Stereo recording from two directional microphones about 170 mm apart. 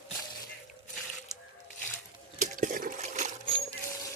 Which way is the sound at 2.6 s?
50° right (ahead or behind).